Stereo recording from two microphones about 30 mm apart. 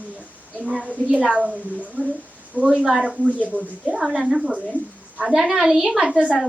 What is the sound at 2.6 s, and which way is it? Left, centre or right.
Speech, right.